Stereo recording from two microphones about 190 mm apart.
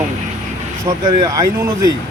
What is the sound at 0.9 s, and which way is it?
Speech, 20° right (ahead or behind).